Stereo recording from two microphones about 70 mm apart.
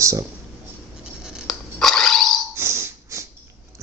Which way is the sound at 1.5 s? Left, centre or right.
Centre.